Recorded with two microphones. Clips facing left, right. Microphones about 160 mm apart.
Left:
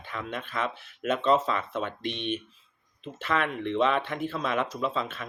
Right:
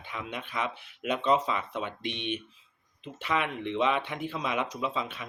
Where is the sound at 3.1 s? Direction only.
10° right (ahead or behind).